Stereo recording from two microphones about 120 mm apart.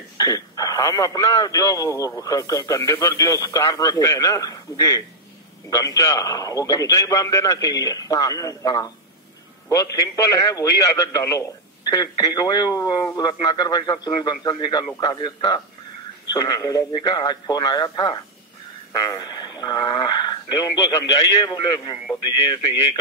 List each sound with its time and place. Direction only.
0.2 s speech: 30° left (ahead or behind)